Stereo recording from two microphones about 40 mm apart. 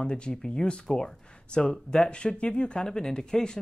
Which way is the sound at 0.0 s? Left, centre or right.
Left.